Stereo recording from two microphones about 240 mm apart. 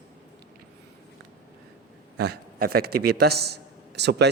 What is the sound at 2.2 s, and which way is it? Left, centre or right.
A man's voice, right.